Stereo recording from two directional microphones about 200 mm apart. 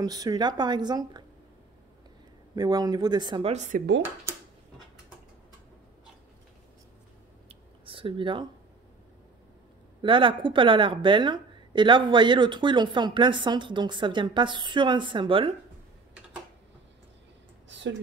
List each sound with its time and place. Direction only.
0.0 s a woman's voice: 20° right (ahead or behind)
2.5 s a woman's voice: 20° right (ahead or behind)
3.5 s speech: 35° right (ahead or behind)
7.4 s a sound: 25° right (ahead or behind)
10.0 s a woman's voice: 25° right (ahead or behind)
17.6 s a sound: 65° right (ahead or behind)